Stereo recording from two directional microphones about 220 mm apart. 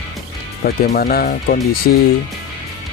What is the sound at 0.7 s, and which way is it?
Speech, 45° left (ahead or behind).